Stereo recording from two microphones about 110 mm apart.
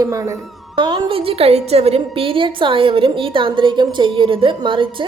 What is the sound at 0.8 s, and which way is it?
A woman's voice, 45° right (ahead or behind).